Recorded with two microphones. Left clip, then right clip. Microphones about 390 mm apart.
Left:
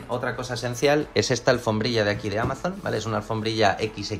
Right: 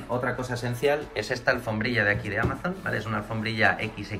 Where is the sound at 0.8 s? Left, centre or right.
Centre.